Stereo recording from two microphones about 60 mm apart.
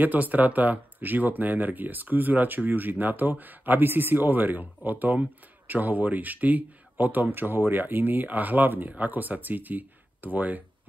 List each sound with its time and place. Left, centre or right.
0.0 s speech: right